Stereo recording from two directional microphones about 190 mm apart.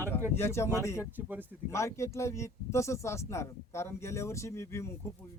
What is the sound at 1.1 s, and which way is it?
Speech, 10° right (ahead or behind).